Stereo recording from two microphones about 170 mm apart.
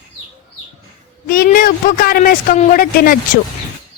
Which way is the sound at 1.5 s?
60° left (ahead or behind).